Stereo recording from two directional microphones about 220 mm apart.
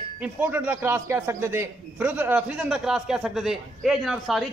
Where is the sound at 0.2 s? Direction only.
5° right (ahead or behind).